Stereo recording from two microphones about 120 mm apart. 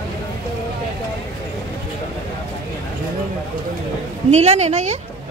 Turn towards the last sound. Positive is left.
turn(degrees=-70)  # may be behind; listen again after turning